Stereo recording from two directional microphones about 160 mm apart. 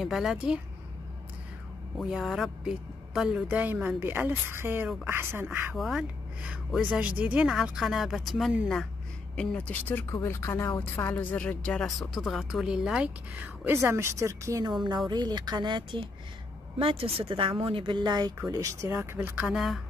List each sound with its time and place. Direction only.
0.0 s speech: centre (ahead or behind)
2.0 s a woman's voice: centre (ahead or behind)
5.8 s speech: centre (ahead or behind)
19.5 s speech: centre (ahead or behind)